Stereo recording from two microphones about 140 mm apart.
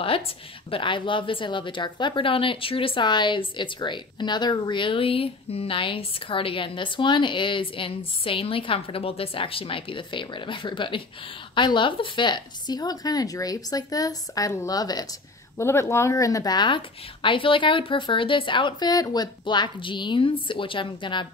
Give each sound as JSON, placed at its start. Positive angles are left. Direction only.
{"t": 0.7, "sound": "a woman's voice", "side_deg": 40}